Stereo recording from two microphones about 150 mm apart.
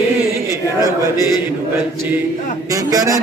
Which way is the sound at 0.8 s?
20° right (ahead or behind).